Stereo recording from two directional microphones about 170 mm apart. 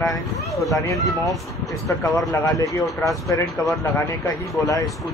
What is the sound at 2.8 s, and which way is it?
Speech, centre (ahead or behind).